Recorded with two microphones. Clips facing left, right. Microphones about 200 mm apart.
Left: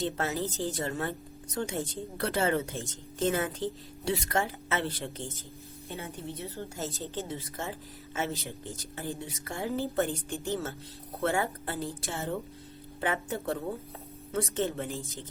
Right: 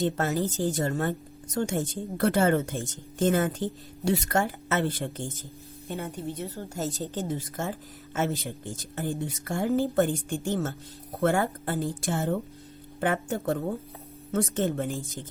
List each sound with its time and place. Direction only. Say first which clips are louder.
0.0 s speech: right 5 dB; 45° right (ahead or behind)